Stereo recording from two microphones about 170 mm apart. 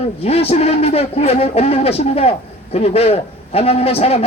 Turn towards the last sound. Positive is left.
turn(degrees=35)  # may be behind; listen again after turning